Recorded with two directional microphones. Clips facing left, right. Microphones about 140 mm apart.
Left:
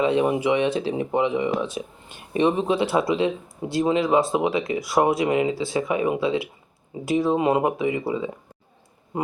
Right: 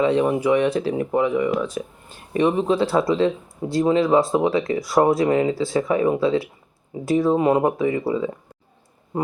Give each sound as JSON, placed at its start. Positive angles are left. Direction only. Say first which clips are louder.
{"t": 0.0, "sound": "speech", "louder": "right 2 dB", "side_deg": 20}